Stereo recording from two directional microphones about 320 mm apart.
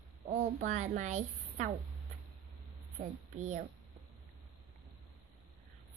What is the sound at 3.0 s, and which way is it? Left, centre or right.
Speech, right.